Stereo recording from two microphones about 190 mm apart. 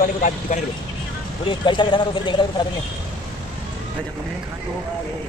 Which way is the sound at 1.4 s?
25° left (ahead or behind).